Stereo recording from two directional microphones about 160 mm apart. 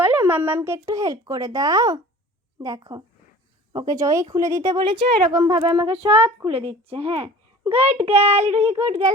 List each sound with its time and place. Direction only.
0.0 s a woman's voice: 15° right (ahead or behind); by 9.0 s 40° right (ahead or behind)